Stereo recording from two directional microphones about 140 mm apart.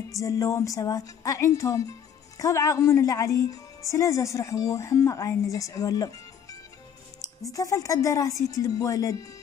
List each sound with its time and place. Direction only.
0.1 s a woman's voice: 25° left (ahead or behind)
7.5 s a woman's voice: 25° left (ahead or behind)